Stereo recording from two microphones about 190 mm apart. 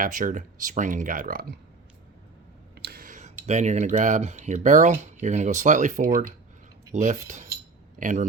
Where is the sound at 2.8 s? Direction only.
55° right (ahead or behind).